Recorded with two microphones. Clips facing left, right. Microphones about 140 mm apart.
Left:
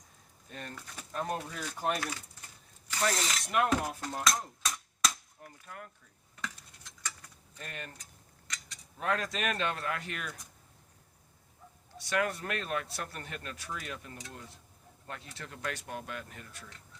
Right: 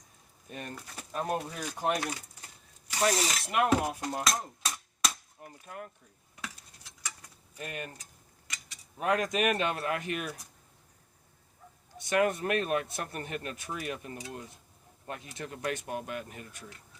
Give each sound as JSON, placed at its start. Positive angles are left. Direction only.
{"t": 0.5, "sound": "dishes", "side_deg": -15}
{"t": 1.1, "sound": "speech", "side_deg": -20}
{"t": 1.5, "sound": "dishes", "side_deg": -15}
{"t": 2.8, "sound": "zipper", "side_deg": -10}
{"t": 3.4, "sound": "dishes", "side_deg": -5}
{"t": 5.4, "sound": "speech", "side_deg": -25}
{"t": 6.3, "sound": "cutlery", "side_deg": -10}
{"t": 8.4, "sound": "speech", "side_deg": -10}
{"t": 11.9, "sound": "speech", "side_deg": -20}